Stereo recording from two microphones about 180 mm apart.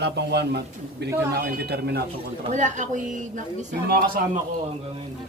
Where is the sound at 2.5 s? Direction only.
45° right (ahead or behind).